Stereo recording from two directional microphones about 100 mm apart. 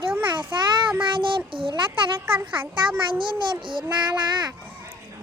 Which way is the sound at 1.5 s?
60° right (ahead or behind).